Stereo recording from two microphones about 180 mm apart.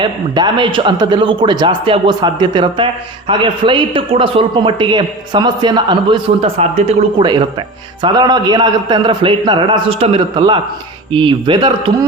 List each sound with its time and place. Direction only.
0.0 s a man's voice: 25° right (ahead or behind)